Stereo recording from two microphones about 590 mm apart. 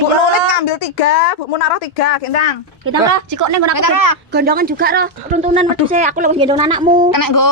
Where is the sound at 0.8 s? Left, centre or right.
Left.